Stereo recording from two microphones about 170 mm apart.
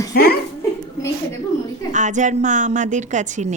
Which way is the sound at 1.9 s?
45° right (ahead or behind).